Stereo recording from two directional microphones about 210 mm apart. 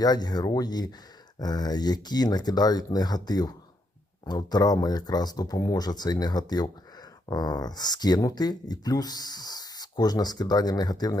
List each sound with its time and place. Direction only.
0.0 s speech: 20° left (ahead or behind)